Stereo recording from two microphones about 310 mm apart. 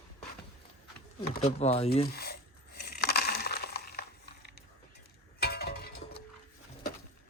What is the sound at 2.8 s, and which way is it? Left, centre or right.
Crushing, left.